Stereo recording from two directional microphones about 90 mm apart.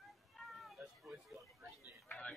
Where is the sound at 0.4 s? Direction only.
Centre (ahead or behind).